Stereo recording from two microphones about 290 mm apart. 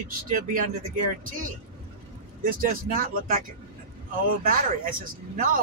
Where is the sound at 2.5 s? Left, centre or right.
Right.